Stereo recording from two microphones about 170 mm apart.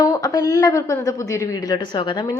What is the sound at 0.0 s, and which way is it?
A woman's voice, 20° left (ahead or behind).